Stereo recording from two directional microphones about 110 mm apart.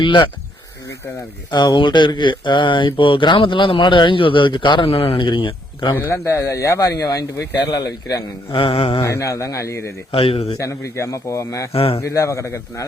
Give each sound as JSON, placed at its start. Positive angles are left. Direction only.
{"t": 0.0, "sound": "speech", "side_deg": 45}
{"t": 1.5, "sound": "speech", "side_deg": 45}
{"t": 5.9, "sound": "a man's voice", "side_deg": 20}
{"t": 8.5, "sound": "a man's voice", "side_deg": 60}
{"t": 9.0, "sound": "a man's voice", "side_deg": 25}
{"t": 10.1, "sound": "a man's voice", "side_deg": 60}
{"t": 10.6, "sound": "a man's voice", "side_deg": 25}
{"t": 11.7, "sound": "a man's voice", "side_deg": 60}
{"t": 11.9, "sound": "a man's voice", "side_deg": 30}